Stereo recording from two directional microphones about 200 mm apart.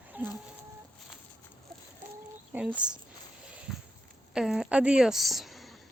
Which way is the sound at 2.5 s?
5° right (ahead or behind).